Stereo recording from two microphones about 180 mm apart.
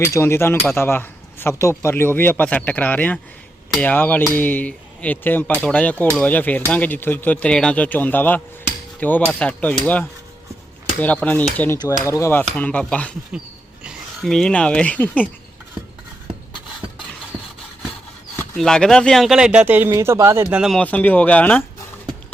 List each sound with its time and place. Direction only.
0.1 s speech: 15° left (ahead or behind)
18.5 s speech: 5° left (ahead or behind)